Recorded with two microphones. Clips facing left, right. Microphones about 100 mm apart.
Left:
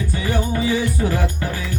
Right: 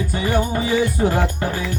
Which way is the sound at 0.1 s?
30° right (ahead or behind).